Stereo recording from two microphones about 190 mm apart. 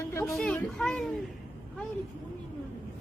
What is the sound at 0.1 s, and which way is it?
Children playing, 15° left (ahead or behind).